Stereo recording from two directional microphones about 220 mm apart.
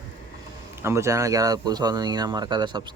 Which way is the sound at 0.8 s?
10° right (ahead or behind).